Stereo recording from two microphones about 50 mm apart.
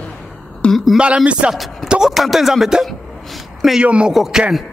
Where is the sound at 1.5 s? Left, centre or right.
Centre.